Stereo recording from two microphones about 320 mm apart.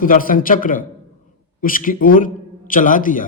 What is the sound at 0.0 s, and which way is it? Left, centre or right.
A man's voice, left.